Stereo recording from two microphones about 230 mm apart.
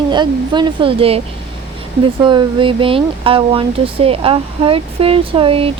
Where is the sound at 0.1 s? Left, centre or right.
Centre.